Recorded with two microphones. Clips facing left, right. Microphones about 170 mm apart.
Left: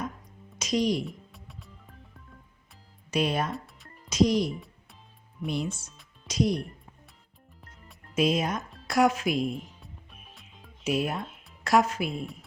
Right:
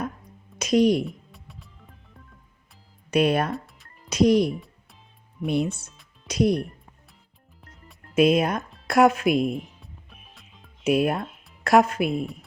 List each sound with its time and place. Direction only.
0.6 s speech: 60° right (ahead or behind)
1.0 s music: centre (ahead or behind)
3.1 s speech: 60° right (ahead or behind)
3.5 s music: centre (ahead or behind)
4.1 s speech: 60° right (ahead or behind)
8.1 s speech: 60° right (ahead or behind)
9.8 s music: centre (ahead or behind)
10.8 s speech: 60° right (ahead or behind)
12.2 s speech: centre (ahead or behind)